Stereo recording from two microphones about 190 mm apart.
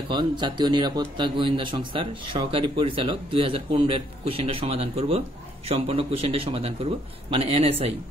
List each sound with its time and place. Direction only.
0.1 s a man's voice: 25° right (ahead or behind)